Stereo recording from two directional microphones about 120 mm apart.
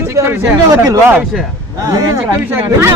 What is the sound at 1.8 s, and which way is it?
Speech, 30° right (ahead or behind).